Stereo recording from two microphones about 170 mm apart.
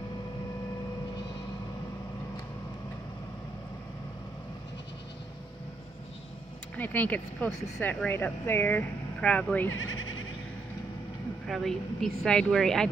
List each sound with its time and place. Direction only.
6.8 s speech: 10° left (ahead or behind)
11.4 s speech: centre (ahead or behind)